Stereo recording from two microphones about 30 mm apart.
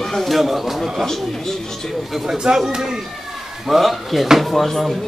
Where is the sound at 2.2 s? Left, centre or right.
Right.